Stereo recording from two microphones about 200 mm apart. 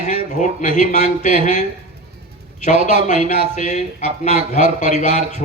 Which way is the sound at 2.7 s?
30° right (ahead or behind).